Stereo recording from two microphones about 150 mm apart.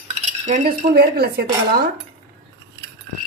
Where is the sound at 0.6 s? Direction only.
90° right.